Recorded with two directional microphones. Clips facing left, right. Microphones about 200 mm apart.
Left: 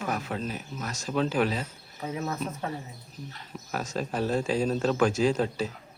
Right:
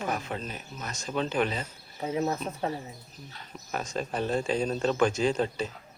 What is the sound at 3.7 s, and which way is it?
A man's voice, 5° left (ahead or behind).